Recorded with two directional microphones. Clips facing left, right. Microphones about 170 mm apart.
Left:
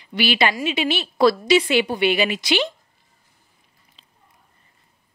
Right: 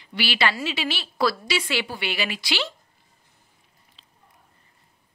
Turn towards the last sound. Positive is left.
turn(degrees=15)  # may be behind; listen again after turning